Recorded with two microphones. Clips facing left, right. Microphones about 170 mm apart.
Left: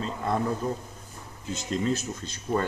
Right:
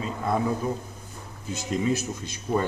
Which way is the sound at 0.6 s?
10° right (ahead or behind).